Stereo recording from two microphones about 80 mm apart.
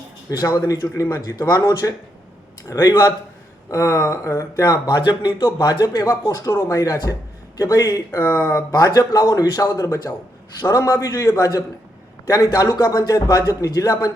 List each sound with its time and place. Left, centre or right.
0.3 s a man's voice: left
3.7 s a man's voice: left
8.7 s a man's voice: left